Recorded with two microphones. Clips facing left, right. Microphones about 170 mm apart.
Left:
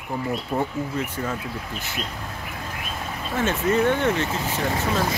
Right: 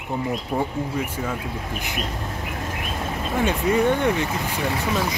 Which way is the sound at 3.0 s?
15° right (ahead or behind).